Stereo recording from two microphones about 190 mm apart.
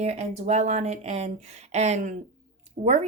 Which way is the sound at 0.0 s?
35° right (ahead or behind).